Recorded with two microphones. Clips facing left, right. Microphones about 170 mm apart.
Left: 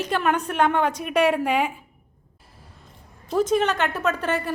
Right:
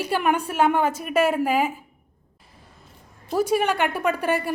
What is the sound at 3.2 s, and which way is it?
Speech, 10° right (ahead or behind).